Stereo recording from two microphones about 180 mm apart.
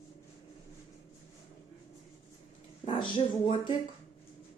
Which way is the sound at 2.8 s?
30° left (ahead or behind).